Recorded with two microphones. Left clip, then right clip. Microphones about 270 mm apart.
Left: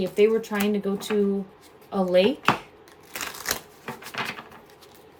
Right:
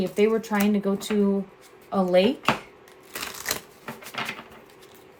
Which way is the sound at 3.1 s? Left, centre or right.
Centre.